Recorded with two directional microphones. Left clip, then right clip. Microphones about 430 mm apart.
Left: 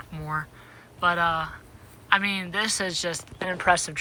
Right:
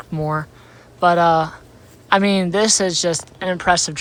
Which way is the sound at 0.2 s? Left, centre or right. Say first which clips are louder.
Right 8 dB; centre.